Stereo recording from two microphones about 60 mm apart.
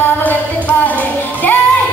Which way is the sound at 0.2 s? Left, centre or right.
Left.